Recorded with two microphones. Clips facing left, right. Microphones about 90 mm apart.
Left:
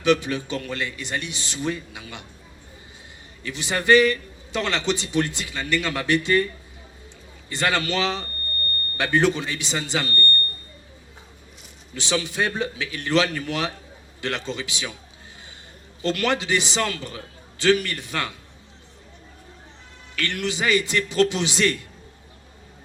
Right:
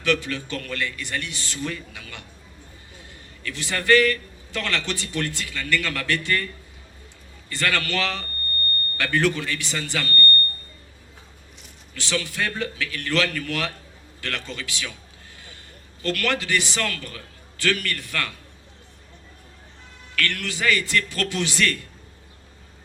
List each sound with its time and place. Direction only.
0.0 s a man's voice: 20° left (ahead or behind)
3.4 s a man's voice: 20° left (ahead or behind)
7.5 s a man's voice: 20° left (ahead or behind)
11.9 s a man's voice: 20° left (ahead or behind)
16.0 s a man's voice: 20° left (ahead or behind)
20.1 s a man's voice: 20° left (ahead or behind)